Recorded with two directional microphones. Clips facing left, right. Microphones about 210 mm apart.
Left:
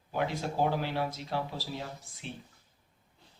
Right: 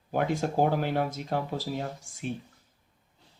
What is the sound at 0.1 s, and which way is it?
Speech, 50° right (ahead or behind).